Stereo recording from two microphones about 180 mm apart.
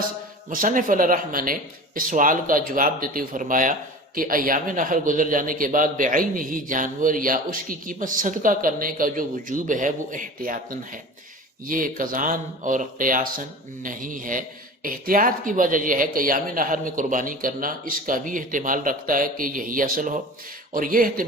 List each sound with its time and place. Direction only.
0.5 s speech: 50° right (ahead or behind)